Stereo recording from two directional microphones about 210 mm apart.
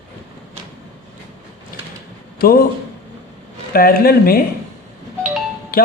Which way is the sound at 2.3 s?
45° left (ahead or behind).